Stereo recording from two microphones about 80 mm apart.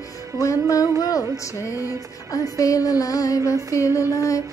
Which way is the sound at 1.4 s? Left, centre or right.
Left.